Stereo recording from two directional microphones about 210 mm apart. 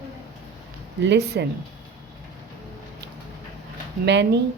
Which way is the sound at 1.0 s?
55° right (ahead or behind).